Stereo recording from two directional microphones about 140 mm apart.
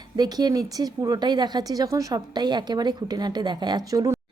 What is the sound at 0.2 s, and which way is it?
Speech, 30° right (ahead or behind).